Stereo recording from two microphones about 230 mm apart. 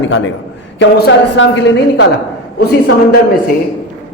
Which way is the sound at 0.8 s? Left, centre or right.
Left.